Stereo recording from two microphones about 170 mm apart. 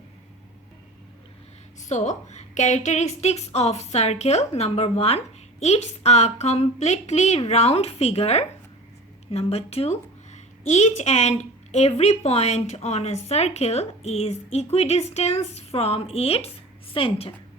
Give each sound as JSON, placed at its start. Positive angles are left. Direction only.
{"t": 1.8, "sound": "a woman's voice", "side_deg": 45}